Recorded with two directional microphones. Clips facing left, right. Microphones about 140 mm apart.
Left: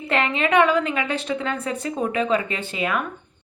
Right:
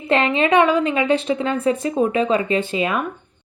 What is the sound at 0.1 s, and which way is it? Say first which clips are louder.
Speech: right 4 dB; 20° right (ahead or behind).